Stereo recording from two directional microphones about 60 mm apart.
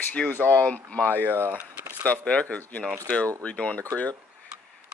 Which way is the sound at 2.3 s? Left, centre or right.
Centre.